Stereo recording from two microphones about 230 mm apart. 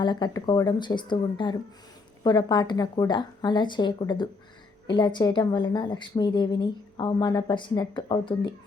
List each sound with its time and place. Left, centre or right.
0.0 s a woman's voice: centre